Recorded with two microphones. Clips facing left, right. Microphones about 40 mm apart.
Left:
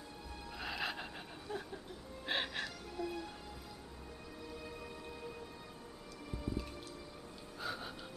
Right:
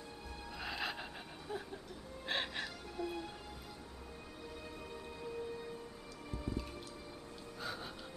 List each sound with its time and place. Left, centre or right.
0.5 s music: centre
1.5 s a sound: centre
2.2 s music: centre
3.0 s music: right
6.3 s music: centre